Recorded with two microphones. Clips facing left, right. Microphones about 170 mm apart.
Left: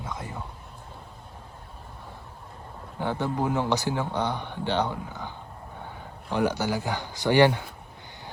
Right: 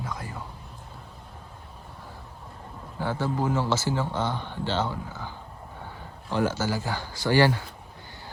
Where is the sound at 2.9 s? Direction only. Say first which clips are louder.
Even; 15° left (ahead or behind).